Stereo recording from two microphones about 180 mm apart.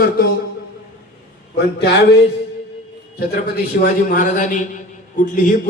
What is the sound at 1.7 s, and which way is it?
Speech, 70° left (ahead or behind).